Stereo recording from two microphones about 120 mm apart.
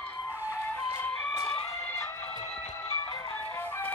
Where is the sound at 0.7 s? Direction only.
15° left (ahead or behind).